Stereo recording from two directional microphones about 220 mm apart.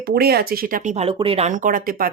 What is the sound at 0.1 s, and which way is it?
Speech, 45° right (ahead or behind).